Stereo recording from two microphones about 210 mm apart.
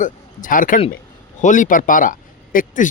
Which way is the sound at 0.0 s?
40° left (ahead or behind).